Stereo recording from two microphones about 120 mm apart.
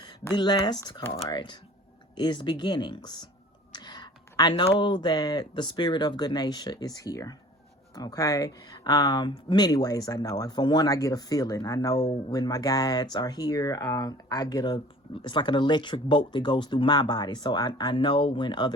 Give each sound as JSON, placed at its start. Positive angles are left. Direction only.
{"t": 0.3, "sound": "speech", "side_deg": 40}
{"t": 3.7, "sound": "a sound", "side_deg": 35}
{"t": 4.6, "sound": "speech", "side_deg": 40}